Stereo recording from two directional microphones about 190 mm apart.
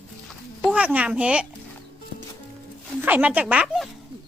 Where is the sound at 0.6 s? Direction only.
5° right (ahead or behind).